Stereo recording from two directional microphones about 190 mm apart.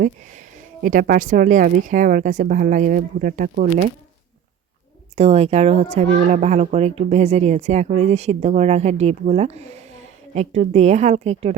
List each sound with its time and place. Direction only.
0.0 s speech: 45° right (ahead or behind)
5.1 s a child's voice: 35° right (ahead or behind)